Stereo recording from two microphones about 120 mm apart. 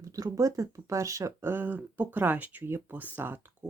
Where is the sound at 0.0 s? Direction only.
30° right (ahead or behind).